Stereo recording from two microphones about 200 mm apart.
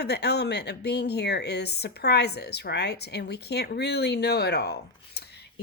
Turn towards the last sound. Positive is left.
turn(degrees=55)  # may be behind; listen again after turning